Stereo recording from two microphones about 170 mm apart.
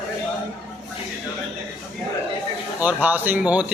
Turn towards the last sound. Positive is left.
turn(degrees=-10)  # may be behind; listen again after turning